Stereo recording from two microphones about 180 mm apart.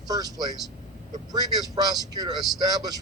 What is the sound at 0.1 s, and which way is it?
A man's voice, 20° right (ahead or behind).